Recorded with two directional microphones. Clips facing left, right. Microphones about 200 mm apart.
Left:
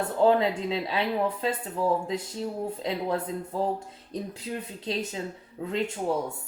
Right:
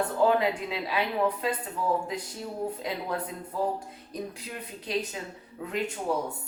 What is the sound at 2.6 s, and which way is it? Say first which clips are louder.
A woman's voice: left 2 dB; 25° left (ahead or behind).